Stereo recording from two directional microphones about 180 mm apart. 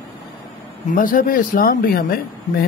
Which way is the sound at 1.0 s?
50° left (ahead or behind).